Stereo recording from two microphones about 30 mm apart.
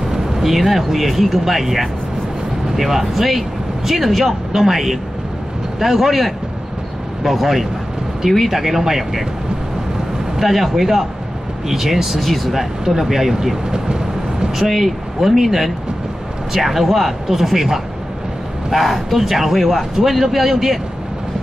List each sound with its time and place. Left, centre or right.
0.1 s speech: centre
10.4 s speech: centre
12.2 s speech: centre
12.5 s speech: centre
13.7 s vehicle: right
14.5 s speech: centre
18.7 s speech: centre